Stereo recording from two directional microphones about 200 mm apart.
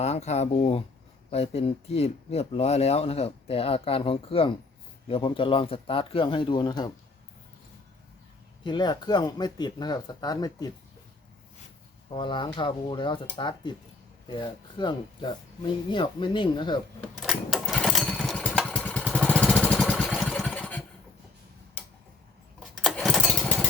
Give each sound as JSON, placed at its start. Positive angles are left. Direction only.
{"t": 0.0, "sound": "speech", "side_deg": 35}
{"t": 8.6, "sound": "speech", "side_deg": 20}
{"t": 12.1, "sound": "speech", "side_deg": 25}
{"t": 17.0, "sound": "lawn mower", "side_deg": 0}
{"t": 22.8, "sound": "lawn mower", "side_deg": 0}